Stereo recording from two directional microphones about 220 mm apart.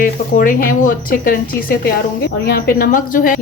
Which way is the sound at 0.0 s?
40° left (ahead or behind).